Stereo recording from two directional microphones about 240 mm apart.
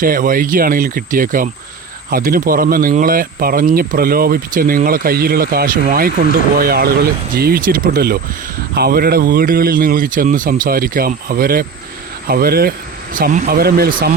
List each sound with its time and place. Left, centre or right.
0.0 s speech: right